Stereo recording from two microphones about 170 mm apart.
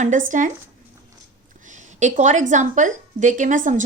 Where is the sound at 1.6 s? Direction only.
45° right (ahead or behind).